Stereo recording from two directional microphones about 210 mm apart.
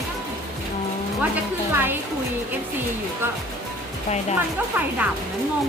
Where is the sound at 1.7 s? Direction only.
10° right (ahead or behind).